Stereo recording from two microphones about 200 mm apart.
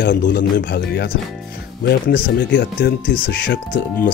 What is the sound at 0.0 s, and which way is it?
Speech, 50° left (ahead or behind).